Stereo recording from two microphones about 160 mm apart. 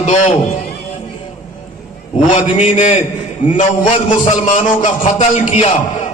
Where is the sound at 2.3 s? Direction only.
35° left (ahead or behind).